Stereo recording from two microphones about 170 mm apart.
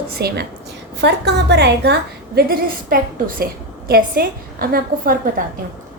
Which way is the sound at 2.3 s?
60° right (ahead or behind).